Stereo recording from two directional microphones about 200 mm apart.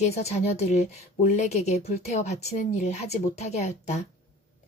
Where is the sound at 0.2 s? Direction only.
35° left (ahead or behind).